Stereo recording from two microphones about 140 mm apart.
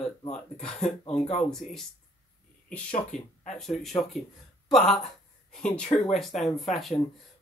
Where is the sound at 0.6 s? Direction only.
5° left (ahead or behind).